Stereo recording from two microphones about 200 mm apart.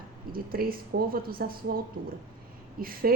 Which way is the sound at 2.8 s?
45° right (ahead or behind).